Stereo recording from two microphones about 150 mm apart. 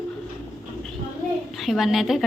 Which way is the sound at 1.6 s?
Centre (ahead or behind).